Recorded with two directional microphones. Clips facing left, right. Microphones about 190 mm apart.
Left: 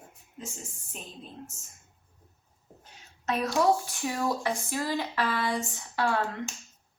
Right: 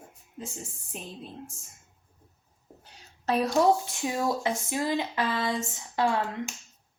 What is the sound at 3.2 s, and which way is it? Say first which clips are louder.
Speech: right 2 dB; 30° right (ahead or behind).